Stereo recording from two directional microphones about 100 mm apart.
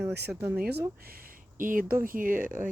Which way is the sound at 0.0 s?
20° right (ahead or behind).